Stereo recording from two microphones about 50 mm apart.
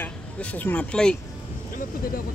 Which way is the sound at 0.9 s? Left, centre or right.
Centre.